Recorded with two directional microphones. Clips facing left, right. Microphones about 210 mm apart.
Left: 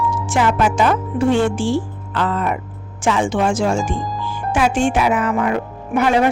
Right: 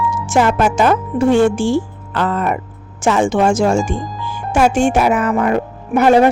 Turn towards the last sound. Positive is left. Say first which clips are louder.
# right 5 dB
turn(degrees=-40)  # may be behind; listen again after turning